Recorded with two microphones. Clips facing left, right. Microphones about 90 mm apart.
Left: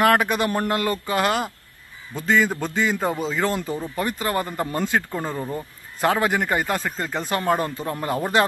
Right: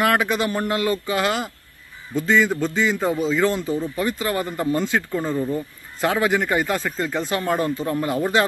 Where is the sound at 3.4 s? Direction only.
40° left (ahead or behind).